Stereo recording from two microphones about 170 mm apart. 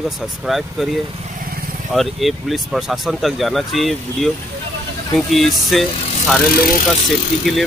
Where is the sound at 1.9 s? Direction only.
Centre (ahead or behind).